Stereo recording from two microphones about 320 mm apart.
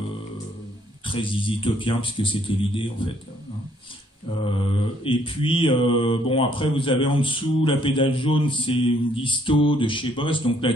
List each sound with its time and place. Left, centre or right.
1.0 s speech: centre
5.0 s speech: centre